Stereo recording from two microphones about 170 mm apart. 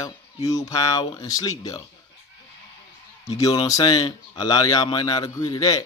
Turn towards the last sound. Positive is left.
turn(degrees=20)  # may be behind; listen again after turning